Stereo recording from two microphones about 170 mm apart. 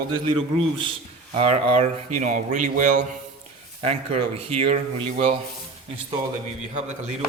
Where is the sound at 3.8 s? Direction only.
35° right (ahead or behind).